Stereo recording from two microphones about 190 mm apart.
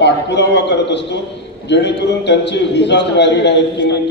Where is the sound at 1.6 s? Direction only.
65° left (ahead or behind).